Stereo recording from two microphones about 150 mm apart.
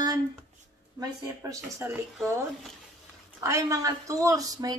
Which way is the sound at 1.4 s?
20° right (ahead or behind).